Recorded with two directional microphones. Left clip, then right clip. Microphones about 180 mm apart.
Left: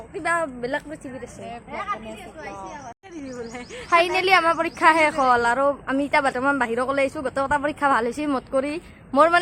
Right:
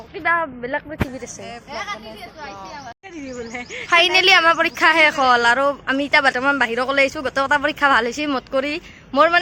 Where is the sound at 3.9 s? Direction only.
Centre (ahead or behind).